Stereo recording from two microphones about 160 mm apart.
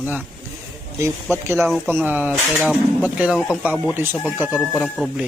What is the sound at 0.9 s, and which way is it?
Speech, 15° right (ahead or behind).